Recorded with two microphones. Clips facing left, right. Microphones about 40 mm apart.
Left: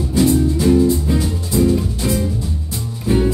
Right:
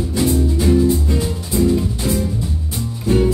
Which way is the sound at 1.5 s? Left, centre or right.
Centre.